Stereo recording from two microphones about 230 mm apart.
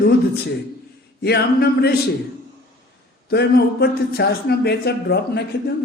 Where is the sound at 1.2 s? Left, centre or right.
Left.